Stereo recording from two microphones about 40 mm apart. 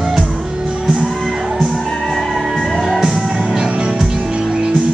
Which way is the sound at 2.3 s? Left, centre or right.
Centre.